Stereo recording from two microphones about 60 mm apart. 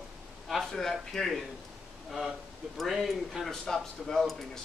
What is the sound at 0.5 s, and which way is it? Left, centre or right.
A man's voice, centre.